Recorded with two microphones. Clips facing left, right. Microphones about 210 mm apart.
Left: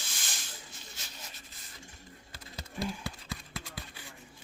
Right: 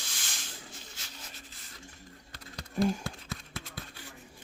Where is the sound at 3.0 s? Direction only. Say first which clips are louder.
Right 1 dB; centre (ahead or behind).